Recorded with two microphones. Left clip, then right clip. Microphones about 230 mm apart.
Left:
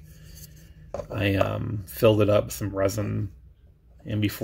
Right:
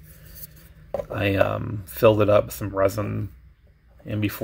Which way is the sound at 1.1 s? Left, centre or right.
Centre.